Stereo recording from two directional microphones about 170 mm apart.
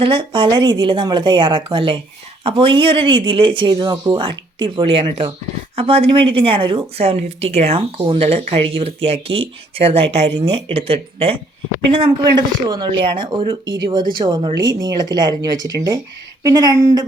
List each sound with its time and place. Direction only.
0.0 s a woman's voice: 30° right (ahead or behind)